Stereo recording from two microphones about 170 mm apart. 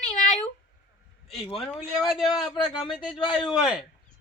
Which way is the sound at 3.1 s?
30° left (ahead or behind).